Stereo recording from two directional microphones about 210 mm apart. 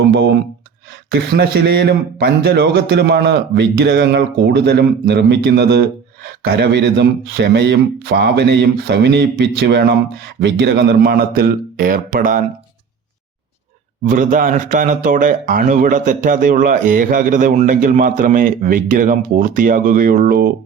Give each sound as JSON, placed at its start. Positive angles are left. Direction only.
{"t": 0.0, "sound": "a sound", "side_deg": -55}
{"t": 1.1, "sound": "speech", "side_deg": -50}
{"t": 14.1, "sound": "speech", "side_deg": -40}